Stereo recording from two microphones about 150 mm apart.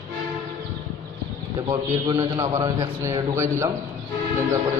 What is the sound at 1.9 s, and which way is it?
A man's voice, 25° right (ahead or behind).